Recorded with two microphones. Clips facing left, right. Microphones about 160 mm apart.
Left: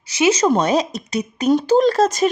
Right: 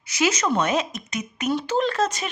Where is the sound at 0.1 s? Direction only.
30° left (ahead or behind).